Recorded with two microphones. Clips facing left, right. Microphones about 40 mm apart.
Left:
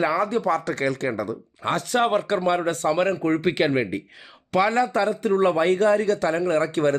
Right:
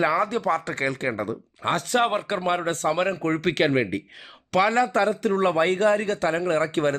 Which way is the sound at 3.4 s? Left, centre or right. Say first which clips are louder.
Left 1 dB; right.